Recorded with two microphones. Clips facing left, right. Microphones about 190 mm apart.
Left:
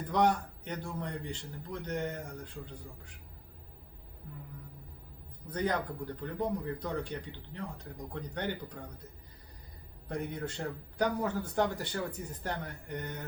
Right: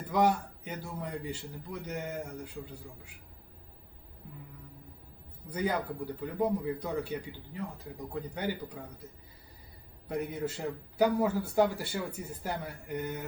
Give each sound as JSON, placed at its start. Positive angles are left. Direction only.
{"t": 0.1, "sound": "speech", "side_deg": -5}
{"t": 5.5, "sound": "speech", "side_deg": -5}
{"t": 10.1, "sound": "speech", "side_deg": -5}